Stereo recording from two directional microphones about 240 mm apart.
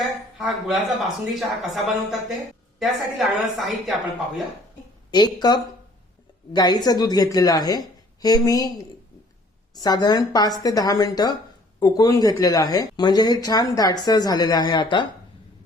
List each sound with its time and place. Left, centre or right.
0.3 s a woman's voice: centre
5.1 s speech: centre
9.7 s speech: centre